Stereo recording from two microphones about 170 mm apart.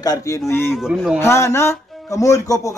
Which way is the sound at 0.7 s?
5° right (ahead or behind).